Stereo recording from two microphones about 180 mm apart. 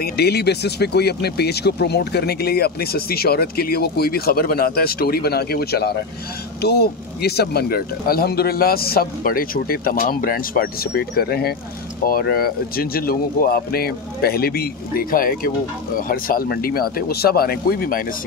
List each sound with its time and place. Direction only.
0.0 s speech: 60° left (ahead or behind)